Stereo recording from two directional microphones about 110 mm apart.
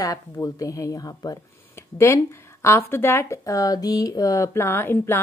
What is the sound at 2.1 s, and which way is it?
Speech, 25° left (ahead or behind).